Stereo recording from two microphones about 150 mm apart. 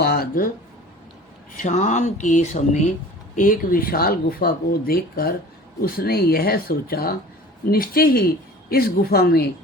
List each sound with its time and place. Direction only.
0.0 s a sound: 90° left
1.5 s speech: 60° left (ahead or behind)
3.3 s speech: 65° left (ahead or behind); by 9.5 s 90° left